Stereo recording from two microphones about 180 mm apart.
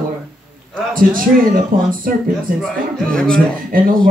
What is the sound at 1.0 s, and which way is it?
Speech, 50° right (ahead or behind).